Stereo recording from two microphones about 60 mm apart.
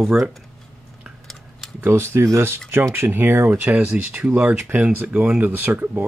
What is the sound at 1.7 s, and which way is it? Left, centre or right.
Speech, right.